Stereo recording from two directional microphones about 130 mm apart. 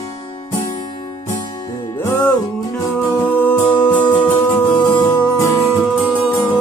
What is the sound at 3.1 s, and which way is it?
Music, 15° left (ahead or behind).